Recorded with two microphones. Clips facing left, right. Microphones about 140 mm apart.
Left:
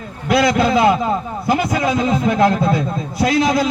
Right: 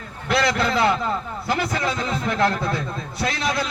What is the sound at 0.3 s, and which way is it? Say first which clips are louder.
A man's voice: left 6 dB; 10° left (ahead or behind).